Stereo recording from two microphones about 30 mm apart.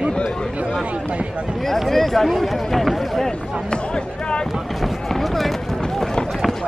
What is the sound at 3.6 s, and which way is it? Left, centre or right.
Music, left.